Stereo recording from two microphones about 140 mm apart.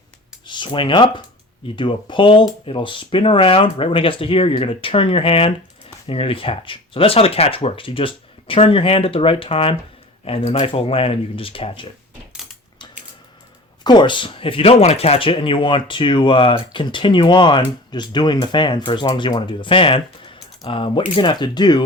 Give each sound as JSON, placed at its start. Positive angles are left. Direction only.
{"t": 0.4, "sound": "speech", "side_deg": 35}
{"t": 13.8, "sound": "speech", "side_deg": 35}